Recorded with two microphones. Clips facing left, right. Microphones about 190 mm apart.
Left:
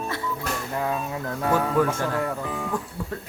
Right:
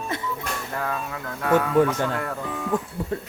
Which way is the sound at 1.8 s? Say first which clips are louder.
Right 3 dB; 25° right (ahead or behind).